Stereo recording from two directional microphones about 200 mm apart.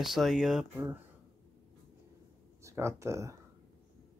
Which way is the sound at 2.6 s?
15° right (ahead or behind).